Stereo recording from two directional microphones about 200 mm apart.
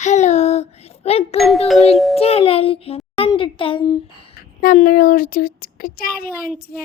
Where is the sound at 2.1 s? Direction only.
30° left (ahead or behind).